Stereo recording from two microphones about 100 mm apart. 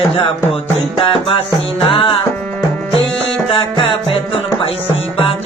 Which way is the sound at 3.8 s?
65° left (ahead or behind).